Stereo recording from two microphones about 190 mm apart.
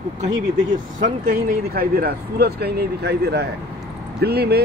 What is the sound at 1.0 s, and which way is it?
Speech, 50° right (ahead or behind).